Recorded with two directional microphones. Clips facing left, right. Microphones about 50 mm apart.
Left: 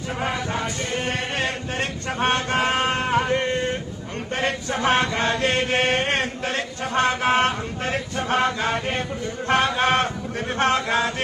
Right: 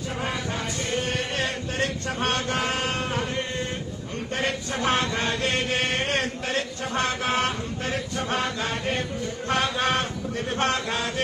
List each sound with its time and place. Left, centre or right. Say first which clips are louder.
1.0 s chant: left 2 dB; left
3.1 s a sound: left 7 dB; left
4.3 s chant: left 3 dB; left